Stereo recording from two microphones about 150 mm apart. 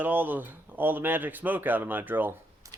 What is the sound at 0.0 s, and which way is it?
Speech, 10° right (ahead or behind).